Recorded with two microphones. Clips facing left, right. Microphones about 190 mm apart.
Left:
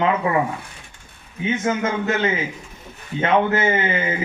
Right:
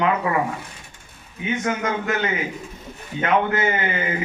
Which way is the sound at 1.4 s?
25° left (ahead or behind).